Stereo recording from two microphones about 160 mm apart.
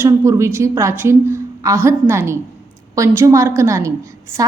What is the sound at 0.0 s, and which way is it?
A woman's voice, 20° right (ahead or behind).